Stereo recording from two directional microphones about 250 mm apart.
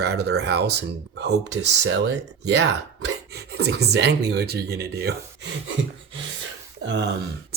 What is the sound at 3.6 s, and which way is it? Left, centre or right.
Speech, right.